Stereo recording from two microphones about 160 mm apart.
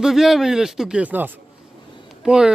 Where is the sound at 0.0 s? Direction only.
Centre (ahead or behind).